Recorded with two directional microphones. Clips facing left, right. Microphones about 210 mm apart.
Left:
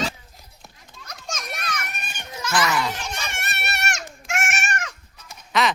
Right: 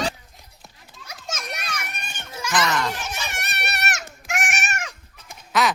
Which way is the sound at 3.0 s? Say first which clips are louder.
Even; 5° right (ahead or behind).